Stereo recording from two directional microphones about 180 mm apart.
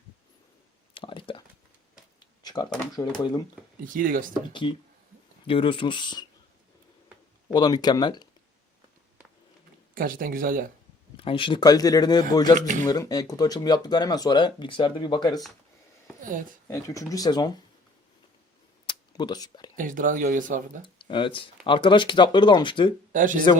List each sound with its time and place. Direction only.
0.9 s a sound: 30° left (ahead or behind)
2.9 s speech: 20° left (ahead or behind)
3.8 s speech: 50° right (ahead or behind)
4.6 s speech: 25° left (ahead or behind)
7.5 s speech: 20° left (ahead or behind)
9.9 s speech: 50° right (ahead or behind)
11.2 s speech: 30° left (ahead or behind)
12.5 s speech: 45° right (ahead or behind)
12.9 s speech: 20° left (ahead or behind)
16.6 s speech: 15° left (ahead or behind)
18.9 s a sound: 25° left (ahead or behind)
19.7 s speech: 50° right (ahead or behind)
20.8 s speech: 25° left (ahead or behind)
23.1 s speech: 45° right (ahead or behind)